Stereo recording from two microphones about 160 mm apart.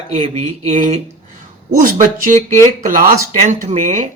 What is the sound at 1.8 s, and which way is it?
A man's voice, 55° right (ahead or behind).